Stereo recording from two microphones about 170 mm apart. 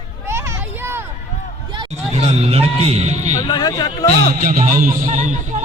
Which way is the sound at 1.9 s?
40° right (ahead or behind).